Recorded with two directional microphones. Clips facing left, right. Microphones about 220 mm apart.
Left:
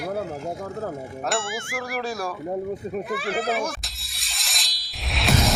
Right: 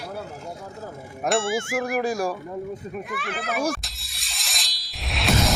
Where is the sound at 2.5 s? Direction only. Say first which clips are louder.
Left 4 dB; 40° left (ahead or behind).